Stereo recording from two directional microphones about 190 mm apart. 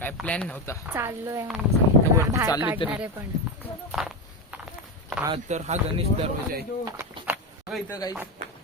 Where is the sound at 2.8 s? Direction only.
25° left (ahead or behind).